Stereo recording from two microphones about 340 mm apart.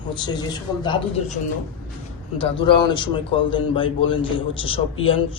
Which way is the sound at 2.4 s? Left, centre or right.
Centre.